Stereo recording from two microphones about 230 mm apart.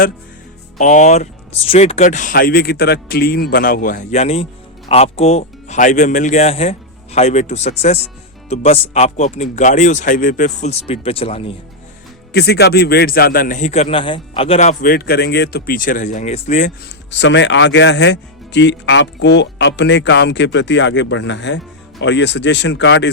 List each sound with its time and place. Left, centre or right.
0.8 s a man's voice: left
12.3 s a man's voice: left
17.1 s speech: left